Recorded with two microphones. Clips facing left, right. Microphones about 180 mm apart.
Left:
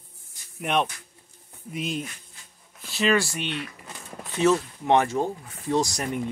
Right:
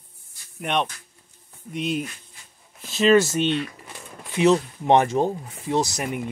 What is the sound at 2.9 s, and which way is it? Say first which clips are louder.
Speech: right 6 dB; 20° right (ahead or behind).